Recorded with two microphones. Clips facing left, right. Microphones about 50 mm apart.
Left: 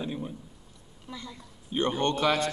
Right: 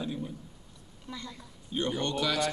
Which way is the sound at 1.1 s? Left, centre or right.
Centre.